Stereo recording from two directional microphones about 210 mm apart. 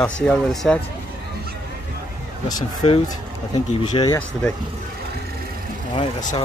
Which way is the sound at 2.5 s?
20° left (ahead or behind).